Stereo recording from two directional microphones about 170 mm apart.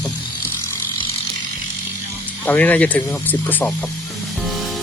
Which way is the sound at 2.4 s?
10° left (ahead or behind).